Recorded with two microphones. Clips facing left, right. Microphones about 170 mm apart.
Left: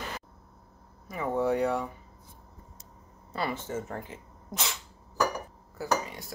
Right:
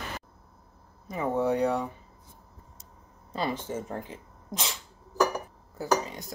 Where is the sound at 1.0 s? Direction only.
20° right (ahead or behind).